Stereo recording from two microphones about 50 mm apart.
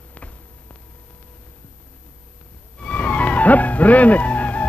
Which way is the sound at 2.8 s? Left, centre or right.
Left.